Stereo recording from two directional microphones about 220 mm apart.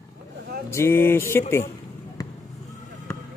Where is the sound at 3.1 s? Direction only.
10° left (ahead or behind).